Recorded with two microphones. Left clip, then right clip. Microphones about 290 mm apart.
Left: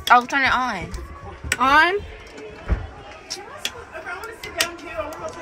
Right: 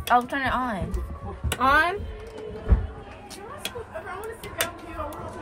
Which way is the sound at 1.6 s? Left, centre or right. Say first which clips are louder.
Left 5 dB; left.